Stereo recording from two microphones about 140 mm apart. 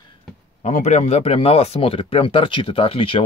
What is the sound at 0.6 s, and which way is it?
Speech, 60° left (ahead or behind).